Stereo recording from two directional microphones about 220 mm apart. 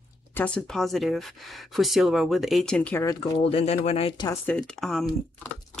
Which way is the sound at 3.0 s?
25° left (ahead or behind).